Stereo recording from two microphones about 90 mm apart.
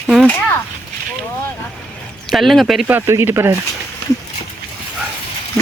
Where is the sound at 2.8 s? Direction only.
25° right (ahead or behind).